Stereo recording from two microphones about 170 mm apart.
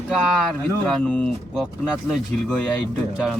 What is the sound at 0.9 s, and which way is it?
Speech, 5° left (ahead or behind).